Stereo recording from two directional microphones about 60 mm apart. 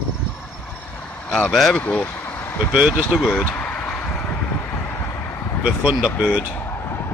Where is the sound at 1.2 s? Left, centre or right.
Left.